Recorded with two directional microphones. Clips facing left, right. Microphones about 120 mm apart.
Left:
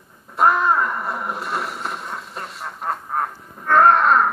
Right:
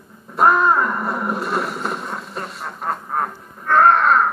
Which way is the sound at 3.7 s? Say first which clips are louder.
Even; 5° left (ahead or behind).